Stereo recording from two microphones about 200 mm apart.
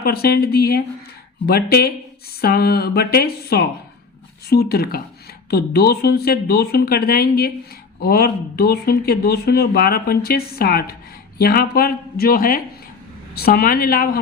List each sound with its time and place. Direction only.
0.0 s speech: 50° left (ahead or behind)